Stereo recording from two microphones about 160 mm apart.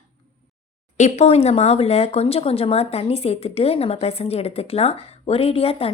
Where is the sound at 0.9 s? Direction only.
45° left (ahead or behind).